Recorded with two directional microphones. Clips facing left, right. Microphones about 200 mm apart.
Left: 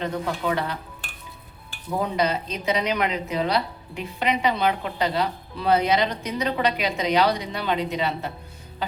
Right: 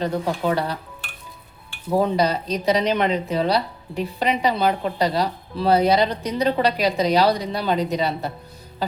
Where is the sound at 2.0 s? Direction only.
35° right (ahead or behind).